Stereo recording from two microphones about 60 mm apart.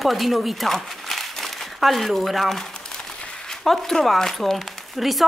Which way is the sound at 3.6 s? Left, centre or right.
Centre.